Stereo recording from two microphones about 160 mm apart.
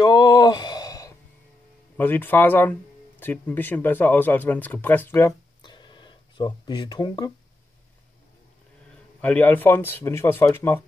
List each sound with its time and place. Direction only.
0.0 s a sound: 25° left (ahead or behind)
2.0 s speech: 10° left (ahead or behind)
9.2 s speech: 10° left (ahead or behind)